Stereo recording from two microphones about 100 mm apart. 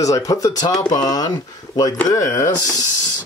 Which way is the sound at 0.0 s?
35° left (ahead or behind).